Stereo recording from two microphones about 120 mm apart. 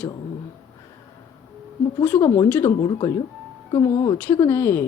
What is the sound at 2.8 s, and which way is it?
Speech, 35° left (ahead or behind).